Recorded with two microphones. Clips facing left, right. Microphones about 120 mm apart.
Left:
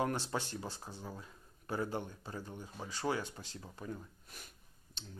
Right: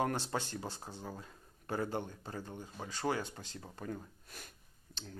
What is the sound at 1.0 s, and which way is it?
Speech, 40° right (ahead or behind).